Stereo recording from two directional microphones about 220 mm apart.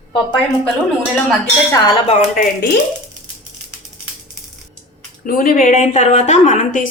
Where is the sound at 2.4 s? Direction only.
45° left (ahead or behind).